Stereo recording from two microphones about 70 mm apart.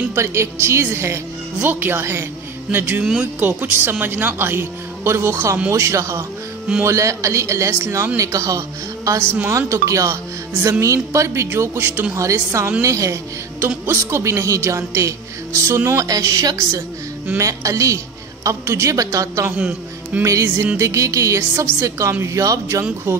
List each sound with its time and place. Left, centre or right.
0.1 s a woman's voice: right
16.1 s a woman's voice: right
19.5 s a man's voice: right
20.2 s a woman's voice: right